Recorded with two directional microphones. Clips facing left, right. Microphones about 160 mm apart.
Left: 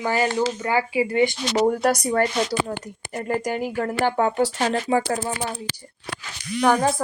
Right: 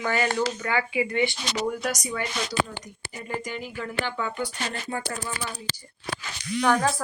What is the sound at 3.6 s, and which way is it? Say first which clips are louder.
Speech: left 8 dB; 60° left (ahead or behind).